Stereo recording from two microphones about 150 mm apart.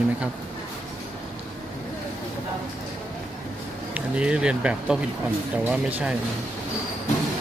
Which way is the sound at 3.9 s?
5° right (ahead or behind).